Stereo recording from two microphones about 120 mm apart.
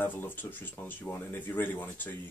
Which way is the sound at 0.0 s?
15° left (ahead or behind).